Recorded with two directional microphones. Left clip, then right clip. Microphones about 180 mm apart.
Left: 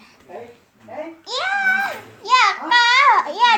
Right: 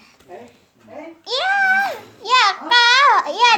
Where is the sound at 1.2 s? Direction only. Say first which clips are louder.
Right 3 dB; 40° right (ahead or behind).